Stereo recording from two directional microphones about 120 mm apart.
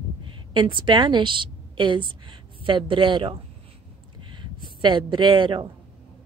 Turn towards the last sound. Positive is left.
turn(degrees=-40)  # may be behind; listen again after turning